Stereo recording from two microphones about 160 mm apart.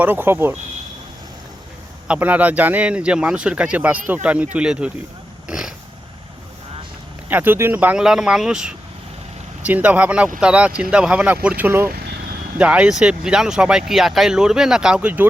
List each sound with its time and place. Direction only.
0.0 s speech: 10° right (ahead or behind)
2.0 s speech: 10° right (ahead or behind)
5.5 s a sound: 5° right (ahead or behind)
7.3 s speech: 10° right (ahead or behind)
11.9 s vehicle: 90° right
12.5 s speech: 5° right (ahead or behind)